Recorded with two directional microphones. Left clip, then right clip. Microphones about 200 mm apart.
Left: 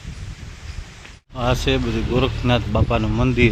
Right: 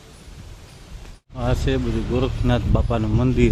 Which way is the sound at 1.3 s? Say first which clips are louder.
Left 4 dB; centre (ahead or behind).